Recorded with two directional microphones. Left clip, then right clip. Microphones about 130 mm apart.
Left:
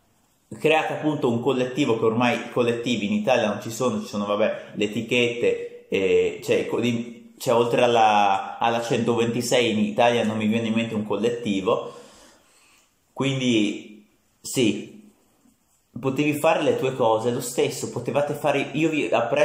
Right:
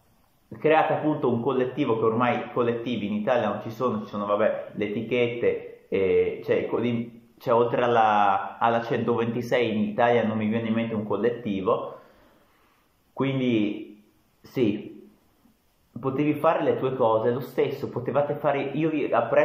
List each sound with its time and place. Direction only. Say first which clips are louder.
0.5 s a man's voice: even; 15° left (ahead or behind)
13.1 s speech: left 2 dB; 10° left (ahead or behind)
16.0 s a man's voice: left 2 dB; 15° left (ahead or behind)